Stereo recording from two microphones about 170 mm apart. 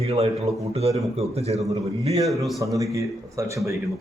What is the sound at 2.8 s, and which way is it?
Speech, 20° right (ahead or behind).